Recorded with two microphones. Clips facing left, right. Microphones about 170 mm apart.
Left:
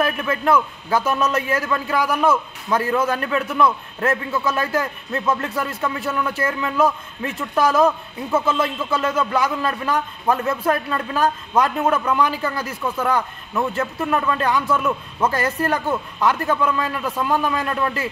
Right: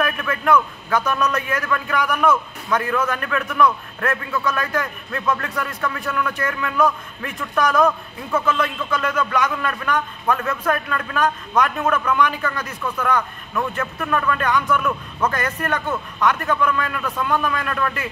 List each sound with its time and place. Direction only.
0.0 s a man's voice: 30° left (ahead or behind)